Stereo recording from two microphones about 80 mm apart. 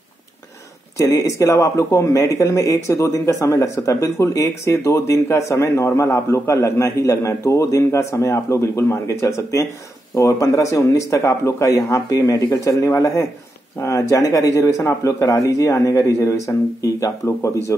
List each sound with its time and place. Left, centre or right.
0.9 s speech: left